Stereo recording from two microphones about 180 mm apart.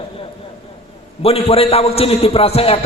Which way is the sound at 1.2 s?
35° left (ahead or behind).